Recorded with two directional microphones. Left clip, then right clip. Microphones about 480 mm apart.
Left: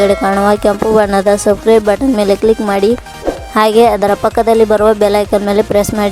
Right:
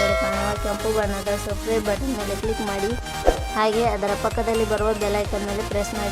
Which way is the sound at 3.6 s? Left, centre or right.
Centre.